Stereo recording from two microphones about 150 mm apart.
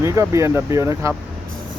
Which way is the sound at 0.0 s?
20° right (ahead or behind).